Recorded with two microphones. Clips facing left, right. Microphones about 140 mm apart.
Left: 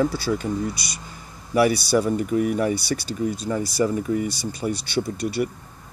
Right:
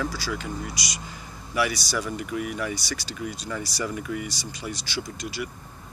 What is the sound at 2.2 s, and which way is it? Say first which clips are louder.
Speech: left 8 dB; 40° left (ahead or behind).